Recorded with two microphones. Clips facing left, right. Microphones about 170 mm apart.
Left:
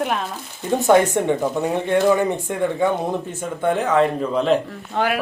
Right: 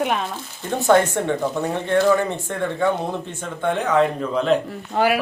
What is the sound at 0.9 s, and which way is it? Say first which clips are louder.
Speech: left 1 dB; 15° left (ahead or behind).